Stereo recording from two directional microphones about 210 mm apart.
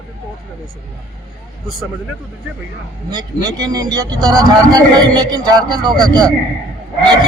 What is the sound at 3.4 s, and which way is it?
A man's voice, 20° right (ahead or behind).